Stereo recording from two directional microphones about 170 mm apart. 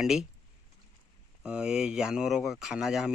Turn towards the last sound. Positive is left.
turn(degrees=0)  # may be behind; listen again after turning